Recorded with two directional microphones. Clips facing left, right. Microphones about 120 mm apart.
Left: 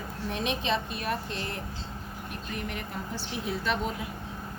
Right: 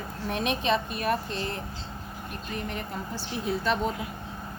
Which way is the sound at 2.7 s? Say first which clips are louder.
Right 2 dB; 35° right (ahead or behind).